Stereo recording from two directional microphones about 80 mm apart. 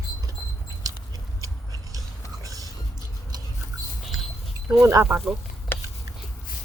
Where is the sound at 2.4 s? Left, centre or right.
Right.